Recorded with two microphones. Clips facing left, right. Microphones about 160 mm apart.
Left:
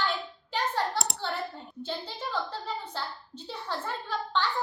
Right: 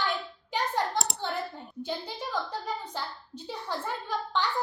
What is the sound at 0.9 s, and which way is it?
Speech, centre (ahead or behind).